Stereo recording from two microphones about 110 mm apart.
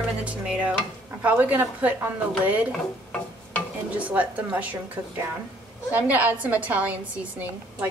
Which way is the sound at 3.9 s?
15° right (ahead or behind).